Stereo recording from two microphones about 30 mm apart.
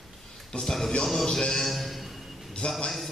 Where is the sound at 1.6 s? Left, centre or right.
Centre.